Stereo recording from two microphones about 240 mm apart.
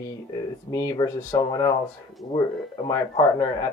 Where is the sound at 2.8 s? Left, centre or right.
Centre.